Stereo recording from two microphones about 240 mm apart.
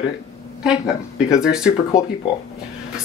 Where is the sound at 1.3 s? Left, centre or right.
Centre.